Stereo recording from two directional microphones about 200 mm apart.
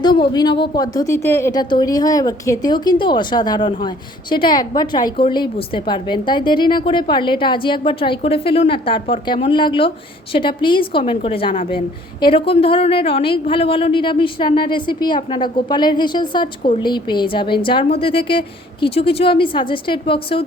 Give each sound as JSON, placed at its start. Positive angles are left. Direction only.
{"t": 0.0, "sound": "a woman's voice", "side_deg": 20}